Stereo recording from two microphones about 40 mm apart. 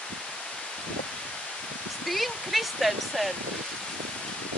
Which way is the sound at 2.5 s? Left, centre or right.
Centre.